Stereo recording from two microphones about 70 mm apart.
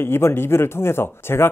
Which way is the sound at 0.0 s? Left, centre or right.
Left.